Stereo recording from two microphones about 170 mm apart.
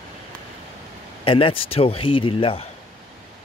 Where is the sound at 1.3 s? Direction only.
35° left (ahead or behind).